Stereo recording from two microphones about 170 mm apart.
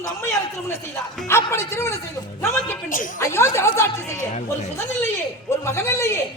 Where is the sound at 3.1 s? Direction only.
15° left (ahead or behind).